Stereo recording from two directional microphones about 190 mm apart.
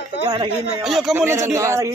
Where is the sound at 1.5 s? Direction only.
15° right (ahead or behind).